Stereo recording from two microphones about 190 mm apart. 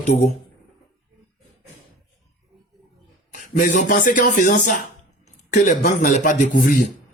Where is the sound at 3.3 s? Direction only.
40° left (ahead or behind).